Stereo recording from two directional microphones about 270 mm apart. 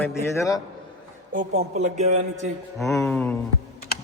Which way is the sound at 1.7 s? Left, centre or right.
Right.